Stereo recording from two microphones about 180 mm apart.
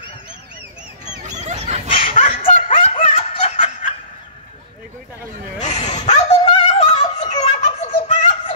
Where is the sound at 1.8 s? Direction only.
35° left (ahead or behind).